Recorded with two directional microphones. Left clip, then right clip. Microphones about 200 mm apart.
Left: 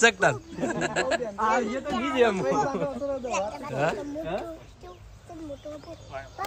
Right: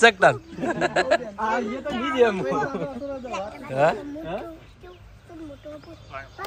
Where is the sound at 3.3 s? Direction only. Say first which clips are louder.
Left 2 dB; 35° left (ahead or behind).